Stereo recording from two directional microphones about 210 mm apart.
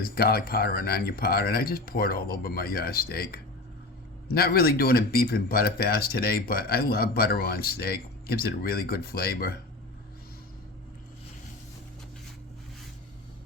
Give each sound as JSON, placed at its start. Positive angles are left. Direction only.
{"t": 0.0, "sound": "speech", "side_deg": 45}